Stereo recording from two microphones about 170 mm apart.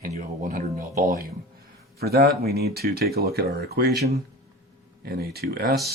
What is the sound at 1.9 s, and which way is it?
Speech, 65° right (ahead or behind).